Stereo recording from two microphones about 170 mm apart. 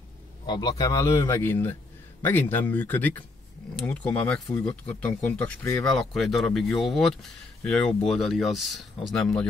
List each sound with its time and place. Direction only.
0.5 s speech: 25° left (ahead or behind); by 9.5 s 5° left (ahead or behind)